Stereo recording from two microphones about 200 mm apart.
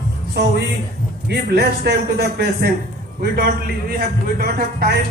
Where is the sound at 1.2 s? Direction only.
55° right (ahead or behind).